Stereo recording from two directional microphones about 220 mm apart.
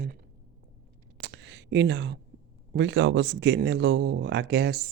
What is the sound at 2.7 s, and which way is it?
Speech, 55° right (ahead or behind).